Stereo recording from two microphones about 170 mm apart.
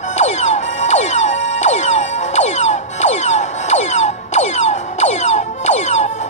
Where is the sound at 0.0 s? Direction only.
40° left (ahead or behind).